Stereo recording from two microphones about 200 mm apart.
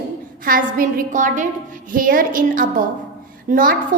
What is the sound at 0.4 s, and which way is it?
A woman's voice, 45° right (ahead or behind).